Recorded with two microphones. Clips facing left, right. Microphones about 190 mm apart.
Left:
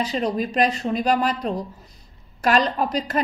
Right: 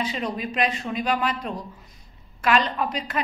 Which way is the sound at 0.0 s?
40° left (ahead or behind).